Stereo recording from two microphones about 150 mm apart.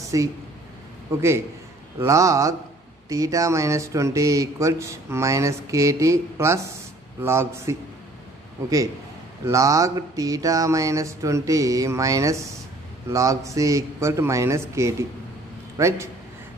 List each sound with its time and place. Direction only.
0.0 s a sound: 20° right (ahead or behind)
2.0 s a man's voice: 20° right (ahead or behind)
9.5 s speech: 20° right (ahead or behind)